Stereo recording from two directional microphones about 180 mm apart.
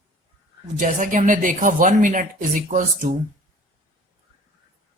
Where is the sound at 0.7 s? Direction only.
45° right (ahead or behind).